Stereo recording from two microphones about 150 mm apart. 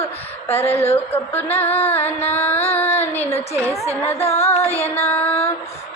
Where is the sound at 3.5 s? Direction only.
20° right (ahead or behind).